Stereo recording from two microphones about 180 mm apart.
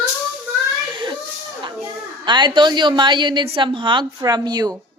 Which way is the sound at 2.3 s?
25° right (ahead or behind).